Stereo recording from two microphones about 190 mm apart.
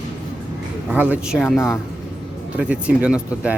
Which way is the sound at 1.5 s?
15° left (ahead or behind).